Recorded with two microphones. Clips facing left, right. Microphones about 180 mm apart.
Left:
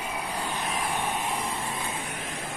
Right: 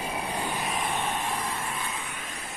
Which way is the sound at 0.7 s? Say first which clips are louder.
Even; centre (ahead or behind).